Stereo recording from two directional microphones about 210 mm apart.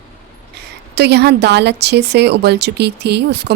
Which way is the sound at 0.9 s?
50° right (ahead or behind).